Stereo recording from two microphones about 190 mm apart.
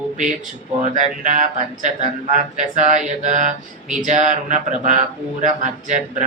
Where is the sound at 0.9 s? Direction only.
40° right (ahead or behind).